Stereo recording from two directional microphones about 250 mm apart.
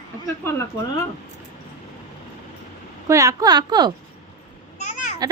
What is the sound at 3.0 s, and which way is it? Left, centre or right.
Speech, centre.